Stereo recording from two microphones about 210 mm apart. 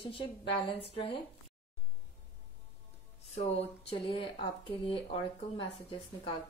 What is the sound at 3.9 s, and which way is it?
Speech, 25° left (ahead or behind).